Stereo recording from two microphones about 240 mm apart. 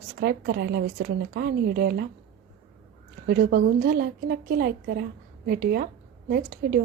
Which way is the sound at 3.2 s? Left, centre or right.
Right.